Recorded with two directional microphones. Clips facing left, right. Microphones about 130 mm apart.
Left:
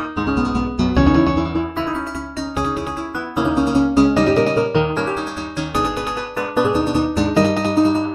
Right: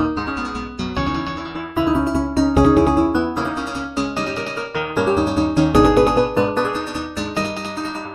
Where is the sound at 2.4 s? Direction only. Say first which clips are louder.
Right 10 dB; 50° right (ahead or behind).